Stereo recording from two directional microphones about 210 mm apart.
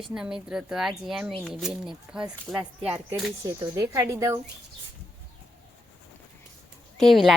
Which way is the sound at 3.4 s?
15° right (ahead or behind).